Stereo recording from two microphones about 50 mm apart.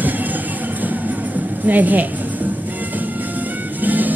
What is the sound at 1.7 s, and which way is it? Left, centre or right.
Speech, right.